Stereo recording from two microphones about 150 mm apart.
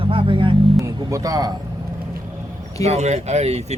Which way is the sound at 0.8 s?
20° right (ahead or behind).